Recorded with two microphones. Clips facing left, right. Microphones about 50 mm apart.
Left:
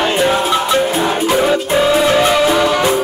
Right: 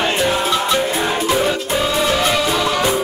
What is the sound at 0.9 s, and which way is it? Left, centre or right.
Music, left.